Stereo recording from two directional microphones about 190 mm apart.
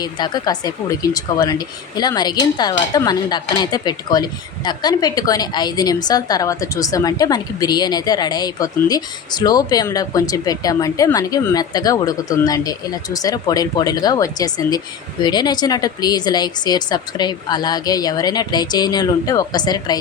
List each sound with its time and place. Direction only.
0.0 s speech: 20° left (ahead or behind)